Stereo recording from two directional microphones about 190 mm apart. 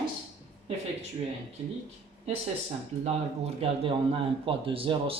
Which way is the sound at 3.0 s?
30° right (ahead or behind).